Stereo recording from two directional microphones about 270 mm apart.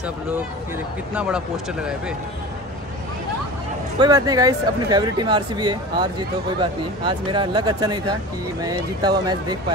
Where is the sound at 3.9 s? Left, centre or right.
Centre.